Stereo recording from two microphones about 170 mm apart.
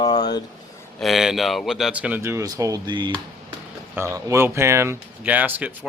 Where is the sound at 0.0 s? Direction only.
25° left (ahead or behind).